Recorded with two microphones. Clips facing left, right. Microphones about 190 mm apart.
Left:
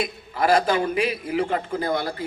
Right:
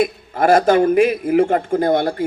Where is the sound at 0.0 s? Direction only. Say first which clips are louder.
Right 7 dB; 45° right (ahead or behind).